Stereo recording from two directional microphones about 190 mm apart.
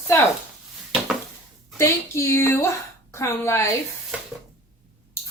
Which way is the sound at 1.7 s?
15° left (ahead or behind).